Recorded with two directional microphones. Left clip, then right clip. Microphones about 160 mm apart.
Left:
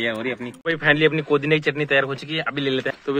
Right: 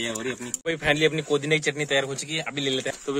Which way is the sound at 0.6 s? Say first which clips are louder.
Left 4 dB; 20° right (ahead or behind).